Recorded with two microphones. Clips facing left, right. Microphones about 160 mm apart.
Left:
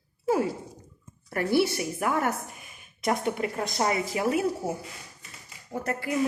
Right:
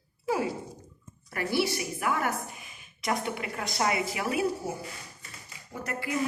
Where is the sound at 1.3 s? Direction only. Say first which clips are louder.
Left 4 dB; 50° left (ahead or behind).